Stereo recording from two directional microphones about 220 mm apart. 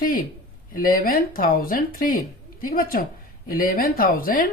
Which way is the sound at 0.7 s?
40° left (ahead or behind).